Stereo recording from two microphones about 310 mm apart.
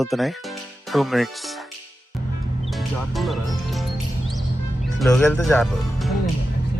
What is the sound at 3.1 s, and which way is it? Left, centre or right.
Music, centre.